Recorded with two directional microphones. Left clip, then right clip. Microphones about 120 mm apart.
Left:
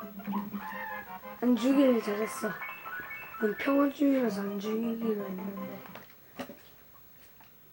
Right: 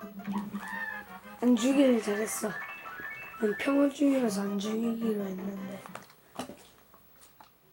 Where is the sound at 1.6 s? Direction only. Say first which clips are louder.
Left 1 dB; centre (ahead or behind).